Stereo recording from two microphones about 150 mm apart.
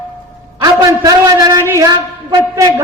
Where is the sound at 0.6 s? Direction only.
25° right (ahead or behind).